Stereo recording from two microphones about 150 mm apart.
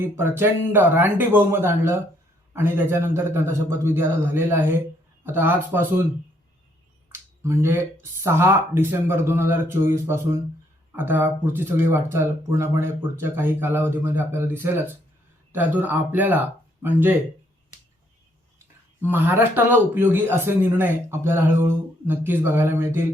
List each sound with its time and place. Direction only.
0.0 s speech: 15° right (ahead or behind)
7.1 s a sound: 15° right (ahead or behind)
8.2 s speech: 15° right (ahead or behind)
19.0 s speech: 15° right (ahead or behind)